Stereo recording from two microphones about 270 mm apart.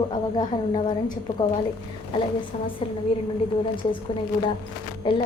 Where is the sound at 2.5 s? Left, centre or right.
Left.